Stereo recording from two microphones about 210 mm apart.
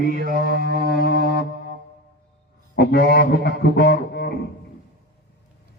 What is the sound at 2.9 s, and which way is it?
Didgeridoo, 50° left (ahead or behind).